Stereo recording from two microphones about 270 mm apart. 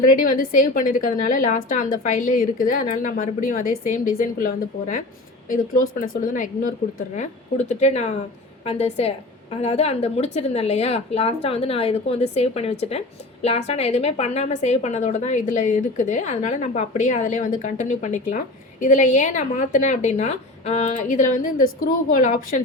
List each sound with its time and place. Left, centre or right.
0.0 s a woman's voice: left